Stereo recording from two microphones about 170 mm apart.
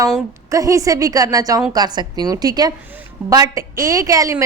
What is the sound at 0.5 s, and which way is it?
A woman's voice, 20° right (ahead or behind).